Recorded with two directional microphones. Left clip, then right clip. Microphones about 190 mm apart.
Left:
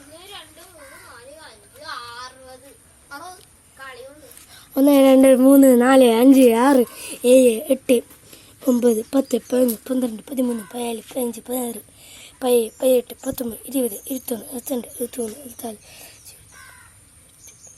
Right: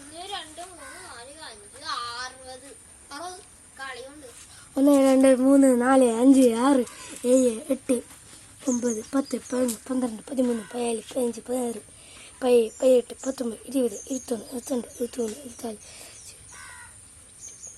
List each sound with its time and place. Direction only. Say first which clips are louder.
1.8 s a sound: right 1 dB; 20° right (ahead or behind)
4.8 s speech: left 6 dB; 45° left (ahead or behind)
6.2 s a woman's voice: left 6 dB; 10° left (ahead or behind)
8.6 s speech: left 10 dB; 25° left (ahead or behind)
9.9 s a woman's voice: left 4 dB; 10° left (ahead or behind)